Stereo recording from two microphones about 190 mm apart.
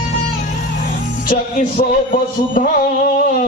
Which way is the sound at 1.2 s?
45° left (ahead or behind).